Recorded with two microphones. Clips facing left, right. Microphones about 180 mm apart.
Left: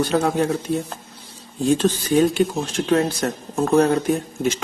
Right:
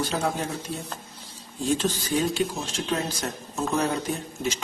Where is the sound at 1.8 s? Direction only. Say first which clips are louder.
Left 8 dB; 60° left (ahead or behind).